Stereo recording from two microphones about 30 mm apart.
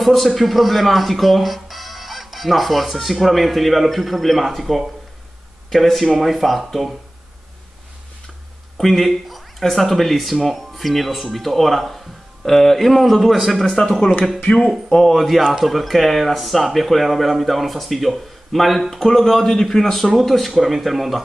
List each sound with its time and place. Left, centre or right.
0.0 s speech: centre
8.7 s speech: centre
13.7 s speech: centre
14.5 s speech: left
15.1 s speech: centre
20.2 s speech: centre